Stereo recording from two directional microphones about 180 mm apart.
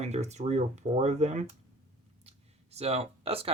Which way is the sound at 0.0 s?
40° right (ahead or behind).